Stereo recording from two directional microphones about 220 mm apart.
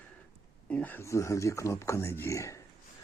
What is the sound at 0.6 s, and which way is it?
Speech, 5° left (ahead or behind).